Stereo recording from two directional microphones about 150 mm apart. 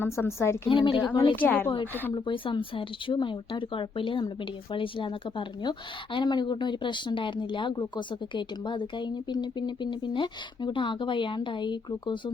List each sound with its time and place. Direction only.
0.0 s a woman's voice: 15° left (ahead or behind)
0.7 s a woman's voice: 35° left (ahead or behind)
1.4 s a woman's voice: 10° left (ahead or behind)
2.1 s a woman's voice: 35° left (ahead or behind)